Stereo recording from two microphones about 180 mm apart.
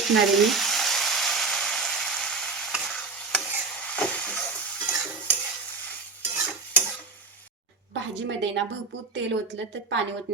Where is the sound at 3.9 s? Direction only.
5° left (ahead or behind).